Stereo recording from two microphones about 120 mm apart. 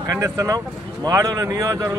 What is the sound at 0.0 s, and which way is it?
A man's voice, 20° right (ahead or behind).